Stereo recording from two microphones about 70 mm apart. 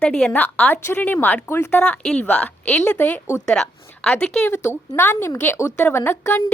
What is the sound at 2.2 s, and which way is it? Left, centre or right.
A woman's voice, left.